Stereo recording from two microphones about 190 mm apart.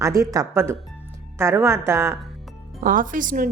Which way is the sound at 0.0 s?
15° right (ahead or behind).